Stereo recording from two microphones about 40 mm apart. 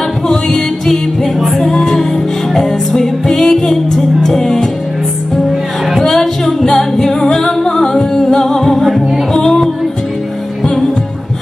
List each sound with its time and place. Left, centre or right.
0.3 s music: centre
6.0 s singing: centre
7.9 s music: centre
9.3 s music: centre